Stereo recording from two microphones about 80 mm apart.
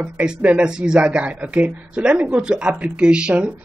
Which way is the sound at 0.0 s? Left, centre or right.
Centre.